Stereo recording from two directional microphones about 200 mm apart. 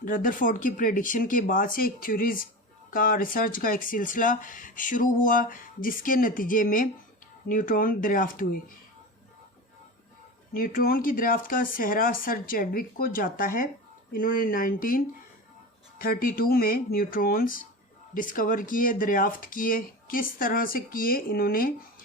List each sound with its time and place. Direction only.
0.0 s speech: 45° left (ahead or behind)
10.5 s speech: 45° left (ahead or behind)